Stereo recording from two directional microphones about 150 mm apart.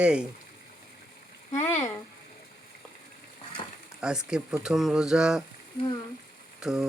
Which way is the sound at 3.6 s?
30° left (ahead or behind).